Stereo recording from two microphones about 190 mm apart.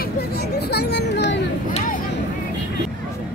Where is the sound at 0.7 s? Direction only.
60° left (ahead or behind).